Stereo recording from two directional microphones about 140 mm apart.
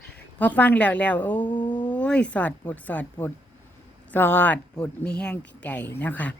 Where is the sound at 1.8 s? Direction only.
10° left (ahead or behind).